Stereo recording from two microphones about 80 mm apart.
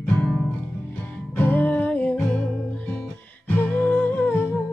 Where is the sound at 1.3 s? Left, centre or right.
Left.